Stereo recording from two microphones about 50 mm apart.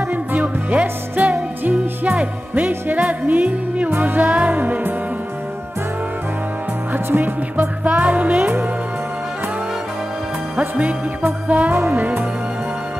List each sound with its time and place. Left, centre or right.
0.1 s music: right
1.3 s music: right
2.0 s music: right
7.5 s music: right
11.4 s music: right
11.7 s music: right